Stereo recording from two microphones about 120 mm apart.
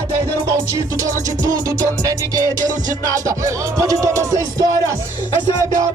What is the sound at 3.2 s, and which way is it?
Music, 25° right (ahead or behind).